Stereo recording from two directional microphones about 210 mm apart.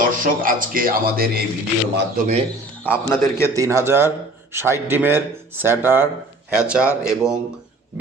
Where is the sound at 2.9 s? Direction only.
10° left (ahead or behind).